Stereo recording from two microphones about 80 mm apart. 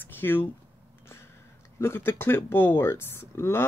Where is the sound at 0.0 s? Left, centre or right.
Left.